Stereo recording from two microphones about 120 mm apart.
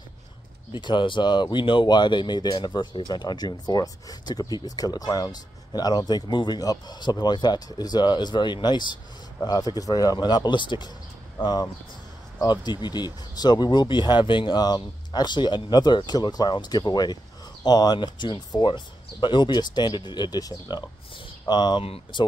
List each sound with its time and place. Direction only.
0.7 s speech: 40° left (ahead or behind)
12.4 s speech: 35° left (ahead or behind)
21.8 s speech: 55° left (ahead or behind)